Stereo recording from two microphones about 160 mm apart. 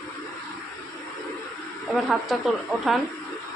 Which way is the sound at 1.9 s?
Centre (ahead or behind).